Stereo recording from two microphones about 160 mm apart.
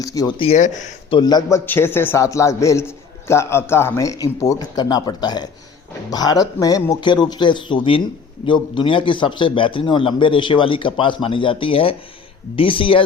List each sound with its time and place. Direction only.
0.0 s speech: 20° left (ahead or behind)
0.3 s speech: 45° left (ahead or behind)
1.1 s a man's voice: 25° left (ahead or behind)